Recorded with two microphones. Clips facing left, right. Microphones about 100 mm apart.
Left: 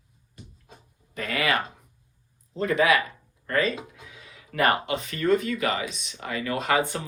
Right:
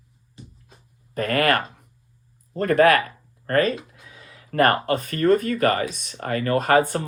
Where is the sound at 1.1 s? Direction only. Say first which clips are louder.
Right 6 dB; 50° right (ahead or behind).